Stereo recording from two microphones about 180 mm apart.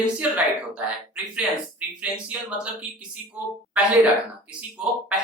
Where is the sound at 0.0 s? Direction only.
5° right (ahead or behind).